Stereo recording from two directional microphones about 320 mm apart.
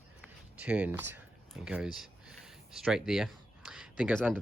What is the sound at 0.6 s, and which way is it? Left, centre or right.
Speech, centre.